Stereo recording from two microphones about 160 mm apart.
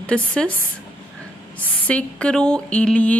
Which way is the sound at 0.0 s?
5° left (ahead or behind).